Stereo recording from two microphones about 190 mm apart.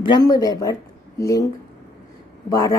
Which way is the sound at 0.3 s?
20° left (ahead or behind).